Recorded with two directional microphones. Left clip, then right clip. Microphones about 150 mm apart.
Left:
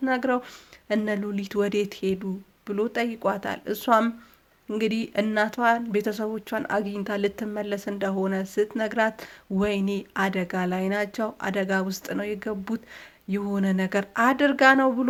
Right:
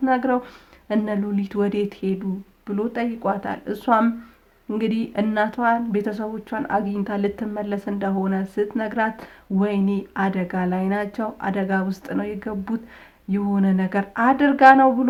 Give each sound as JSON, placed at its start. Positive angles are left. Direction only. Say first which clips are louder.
{"t": 0.0, "sound": "speech", "louder": "right 4 dB", "side_deg": 30}